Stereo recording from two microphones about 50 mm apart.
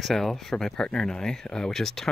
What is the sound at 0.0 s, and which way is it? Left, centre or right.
Speech, centre.